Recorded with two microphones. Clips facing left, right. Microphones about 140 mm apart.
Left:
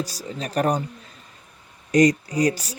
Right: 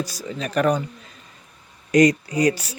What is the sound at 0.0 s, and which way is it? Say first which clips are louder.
Speech: right 1 dB; 35° left (ahead or behind).